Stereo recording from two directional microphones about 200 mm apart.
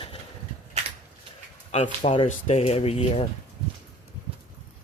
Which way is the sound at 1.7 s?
35° left (ahead or behind).